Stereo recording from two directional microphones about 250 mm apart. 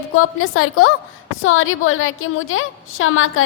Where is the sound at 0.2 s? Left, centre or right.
Left.